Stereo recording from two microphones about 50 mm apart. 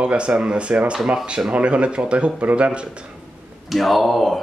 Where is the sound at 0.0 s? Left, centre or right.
Right.